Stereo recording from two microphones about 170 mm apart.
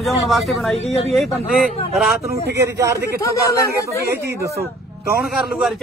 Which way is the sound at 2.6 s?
15° right (ahead or behind).